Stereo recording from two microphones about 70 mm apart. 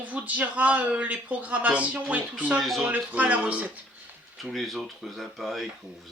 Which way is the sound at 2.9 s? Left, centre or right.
Right.